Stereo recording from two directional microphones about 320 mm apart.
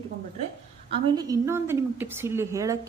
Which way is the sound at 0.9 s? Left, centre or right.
Centre.